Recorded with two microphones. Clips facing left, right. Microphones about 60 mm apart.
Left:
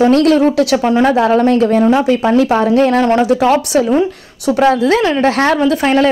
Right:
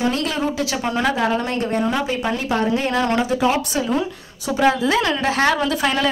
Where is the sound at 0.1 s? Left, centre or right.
Left.